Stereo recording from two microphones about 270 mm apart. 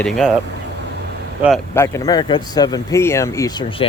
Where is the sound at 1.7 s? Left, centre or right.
Centre.